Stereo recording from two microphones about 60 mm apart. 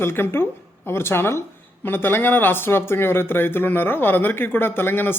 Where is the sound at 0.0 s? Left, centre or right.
Left.